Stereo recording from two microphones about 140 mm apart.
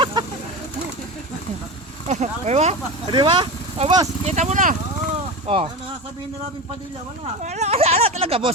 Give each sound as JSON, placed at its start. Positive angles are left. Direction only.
{"t": 0.0, "sound": "a sound", "side_deg": -30}
{"t": 2.0, "sound": "speech", "side_deg": -55}
{"t": 3.1, "sound": "speech", "side_deg": -35}
{"t": 4.3, "sound": "speech", "side_deg": -55}
{"t": 5.5, "sound": "speech", "side_deg": -45}
{"t": 7.4, "sound": "speech", "side_deg": -55}